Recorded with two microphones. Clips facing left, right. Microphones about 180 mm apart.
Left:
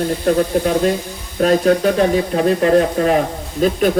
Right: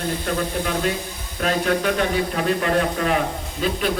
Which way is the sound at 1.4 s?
40° left (ahead or behind).